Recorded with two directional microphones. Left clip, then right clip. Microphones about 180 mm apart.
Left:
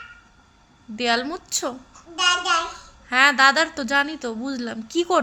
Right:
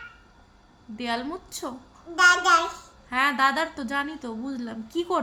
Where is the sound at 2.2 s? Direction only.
25° right (ahead or behind).